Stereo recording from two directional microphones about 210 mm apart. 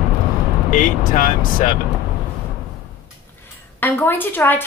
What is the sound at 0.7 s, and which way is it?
Speech, 40° left (ahead or behind).